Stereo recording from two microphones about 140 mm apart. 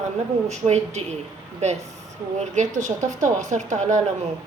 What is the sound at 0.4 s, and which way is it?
Speech, 55° right (ahead or behind).